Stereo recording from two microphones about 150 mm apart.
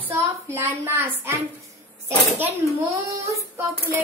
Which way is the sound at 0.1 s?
15° right (ahead or behind).